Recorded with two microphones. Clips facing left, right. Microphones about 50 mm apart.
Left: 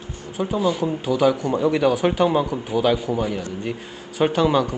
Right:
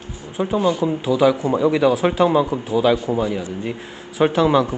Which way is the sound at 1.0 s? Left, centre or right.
Right.